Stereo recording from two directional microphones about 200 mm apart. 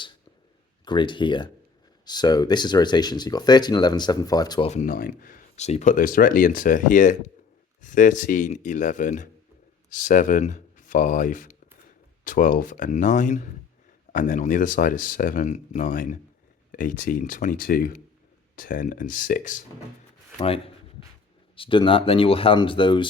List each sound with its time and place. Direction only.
0.9 s speech: 25° left (ahead or behind)
4.7 s speech: 40° left (ahead or behind)
21.5 s speech: 25° left (ahead or behind)